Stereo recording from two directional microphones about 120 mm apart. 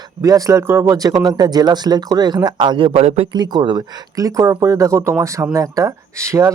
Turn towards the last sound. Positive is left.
turn(degrees=-25)  # may be behind; listen again after turning